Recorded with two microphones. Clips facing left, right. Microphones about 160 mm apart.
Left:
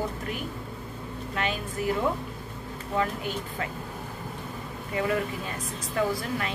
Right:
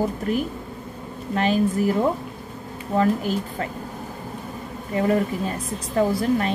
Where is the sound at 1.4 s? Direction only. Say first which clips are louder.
Right 11 dB; 35° right (ahead or behind).